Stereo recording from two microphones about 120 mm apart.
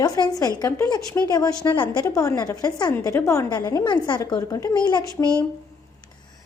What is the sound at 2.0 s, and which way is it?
A woman's voice, 25° left (ahead or behind).